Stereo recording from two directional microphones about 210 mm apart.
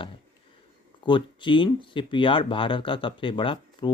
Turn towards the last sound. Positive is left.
turn(degrees=25)  # may be behind; listen again after turning